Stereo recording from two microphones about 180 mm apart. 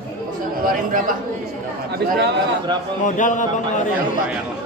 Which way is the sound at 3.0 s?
45° left (ahead or behind).